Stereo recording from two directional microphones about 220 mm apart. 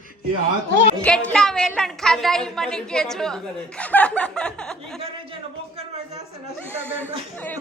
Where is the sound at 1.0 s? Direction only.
5° left (ahead or behind).